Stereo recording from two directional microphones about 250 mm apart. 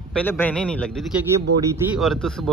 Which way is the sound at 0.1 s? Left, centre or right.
Centre.